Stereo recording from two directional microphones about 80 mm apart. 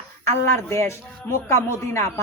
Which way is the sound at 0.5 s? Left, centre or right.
Left.